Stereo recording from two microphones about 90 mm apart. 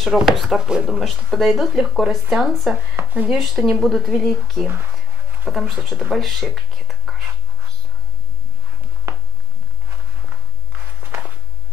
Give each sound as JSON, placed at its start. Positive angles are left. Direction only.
{"t": 0.0, "sound": "speech", "side_deg": 0}
{"t": 3.0, "sound": "speech", "side_deg": -20}
{"t": 3.3, "sound": "speech", "side_deg": -5}
{"t": 5.5, "sound": "speech", "side_deg": -5}
{"t": 11.0, "sound": "walk", "side_deg": -25}